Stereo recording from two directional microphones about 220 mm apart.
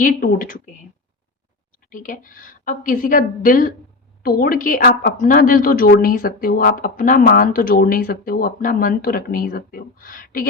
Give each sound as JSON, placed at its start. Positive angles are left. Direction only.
{"t": 0.0, "sound": "a woman's voice", "side_deg": 40}
{"t": 1.9, "sound": "a woman's voice", "side_deg": 35}